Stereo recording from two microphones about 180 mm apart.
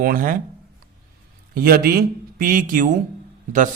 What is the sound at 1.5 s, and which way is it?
Speech, 55° right (ahead or behind).